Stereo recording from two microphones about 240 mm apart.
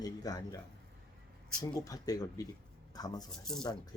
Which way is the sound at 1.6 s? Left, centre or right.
Centre.